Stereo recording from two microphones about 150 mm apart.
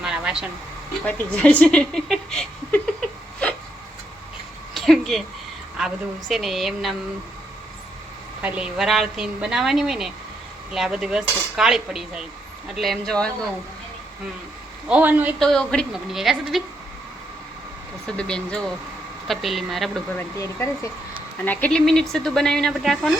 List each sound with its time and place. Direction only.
0.0 s a sound: 5° right (ahead or behind)
1.0 s speech: 10° left (ahead or behind)
4.7 s a sound: centre (ahead or behind)
5.7 s a woman's voice: centre (ahead or behind)
8.4 s a woman's voice: 10° right (ahead or behind)
14.8 s a woman's voice: 10° right (ahead or behind)
15.4 s a woman's voice: 5° left (ahead or behind)
18.0 s a woman's voice: 5° left (ahead or behind)
20.1 s a woman's voice: 20° left (ahead or behind); by 23.1 s centre (ahead or behind)